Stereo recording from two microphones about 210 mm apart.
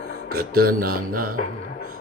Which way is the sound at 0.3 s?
45° right (ahead or behind).